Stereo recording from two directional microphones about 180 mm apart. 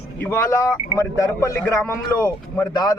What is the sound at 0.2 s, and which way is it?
Speech, 15° left (ahead or behind).